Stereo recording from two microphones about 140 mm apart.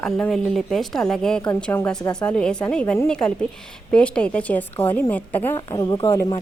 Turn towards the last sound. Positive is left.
turn(degrees=20)  # may be behind; listen again after turning